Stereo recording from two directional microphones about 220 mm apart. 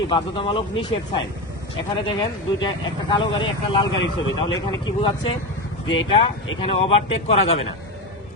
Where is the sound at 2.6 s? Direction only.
20° left (ahead or behind).